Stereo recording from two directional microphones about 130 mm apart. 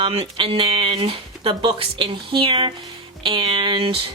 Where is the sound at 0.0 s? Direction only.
45° right (ahead or behind).